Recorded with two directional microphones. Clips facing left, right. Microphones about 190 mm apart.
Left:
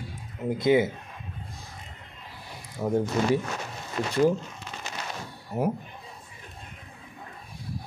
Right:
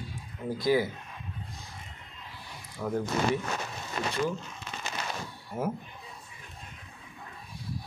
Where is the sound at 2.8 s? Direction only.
25° left (ahead or behind).